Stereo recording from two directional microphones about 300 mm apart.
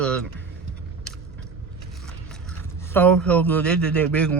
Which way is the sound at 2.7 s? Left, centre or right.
Centre.